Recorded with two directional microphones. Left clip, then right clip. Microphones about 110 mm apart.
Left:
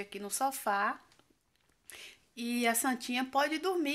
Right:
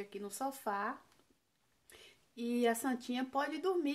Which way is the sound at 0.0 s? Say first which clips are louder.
Left 7 dB; 20° left (ahead or behind).